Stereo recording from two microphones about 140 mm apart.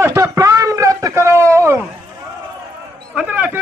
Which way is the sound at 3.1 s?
10° right (ahead or behind).